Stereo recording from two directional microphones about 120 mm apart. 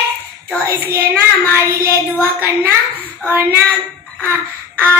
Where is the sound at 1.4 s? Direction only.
15° left (ahead or behind).